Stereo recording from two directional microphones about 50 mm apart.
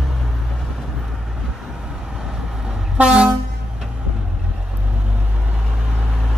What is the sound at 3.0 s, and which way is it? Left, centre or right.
Vehicle, centre.